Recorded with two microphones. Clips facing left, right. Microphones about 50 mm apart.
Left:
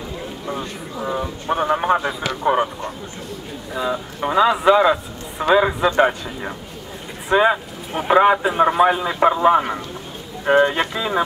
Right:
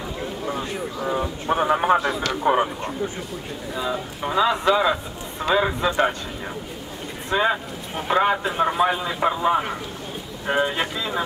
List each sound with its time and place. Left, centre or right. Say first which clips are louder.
0.2 s a sound: right 1 dB; centre
1.0 s speech: left 1 dB; centre
3.7 s a man's voice: left 4 dB; centre
10.7 s a man's voice: left 4 dB; centre